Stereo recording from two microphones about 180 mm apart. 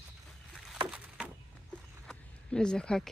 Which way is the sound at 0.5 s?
Centre (ahead or behind).